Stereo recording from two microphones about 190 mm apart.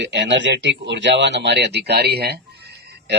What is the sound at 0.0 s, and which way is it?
Speech, 65° right (ahead or behind).